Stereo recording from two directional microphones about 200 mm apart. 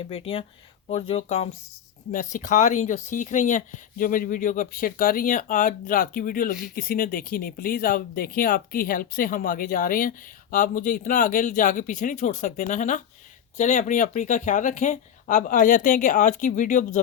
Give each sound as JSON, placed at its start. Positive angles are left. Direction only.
{"t": 0.0, "sound": "speech", "side_deg": 30}